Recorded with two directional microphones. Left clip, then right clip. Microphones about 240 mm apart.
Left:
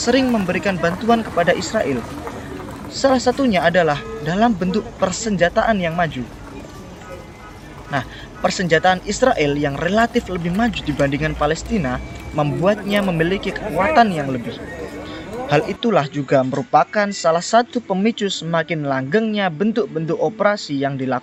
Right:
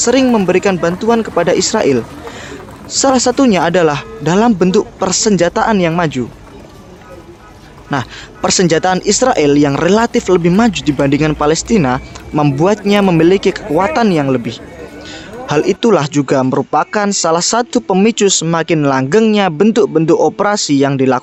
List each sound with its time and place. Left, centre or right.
0.0 s speech: right
7.9 s speech: right